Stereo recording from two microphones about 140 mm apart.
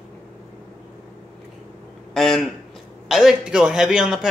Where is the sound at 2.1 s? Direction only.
Centre (ahead or behind).